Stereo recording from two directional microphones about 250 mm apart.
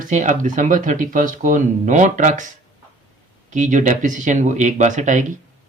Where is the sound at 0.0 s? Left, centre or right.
Right.